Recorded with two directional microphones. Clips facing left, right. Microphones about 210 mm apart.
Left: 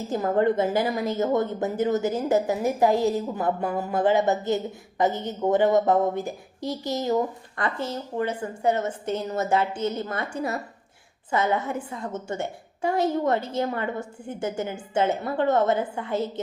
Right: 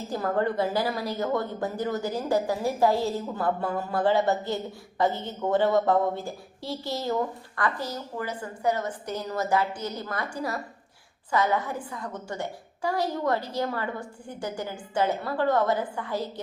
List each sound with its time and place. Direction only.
0.1 s a woman's voice: 20° left (ahead or behind)